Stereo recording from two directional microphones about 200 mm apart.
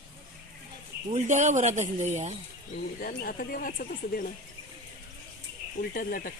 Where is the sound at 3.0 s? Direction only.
45° left (ahead or behind).